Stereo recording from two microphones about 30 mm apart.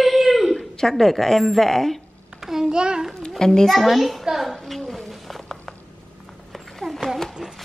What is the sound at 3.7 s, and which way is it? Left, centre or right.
Speech, centre.